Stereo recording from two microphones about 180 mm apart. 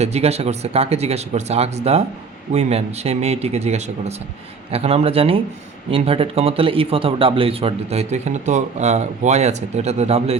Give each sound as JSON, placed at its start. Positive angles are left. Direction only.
{"t": 0.0, "sound": "speech", "side_deg": -35}